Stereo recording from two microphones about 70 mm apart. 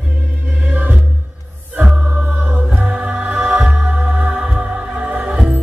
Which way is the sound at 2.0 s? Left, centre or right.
Right.